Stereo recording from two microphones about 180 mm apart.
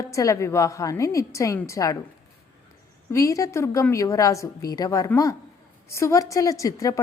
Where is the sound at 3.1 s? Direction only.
20° left (ahead or behind).